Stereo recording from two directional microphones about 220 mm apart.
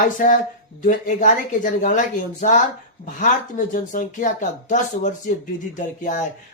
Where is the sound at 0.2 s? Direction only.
40° left (ahead or behind).